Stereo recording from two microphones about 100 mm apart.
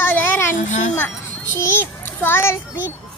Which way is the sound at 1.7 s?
25° left (ahead or behind).